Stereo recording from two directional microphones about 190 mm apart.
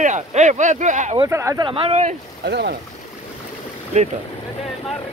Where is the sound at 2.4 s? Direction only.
60° right (ahead or behind).